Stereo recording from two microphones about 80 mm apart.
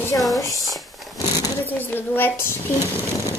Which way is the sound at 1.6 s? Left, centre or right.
Left.